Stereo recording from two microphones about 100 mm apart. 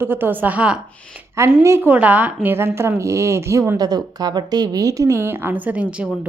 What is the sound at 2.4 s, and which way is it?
A woman's voice, 25° right (ahead or behind).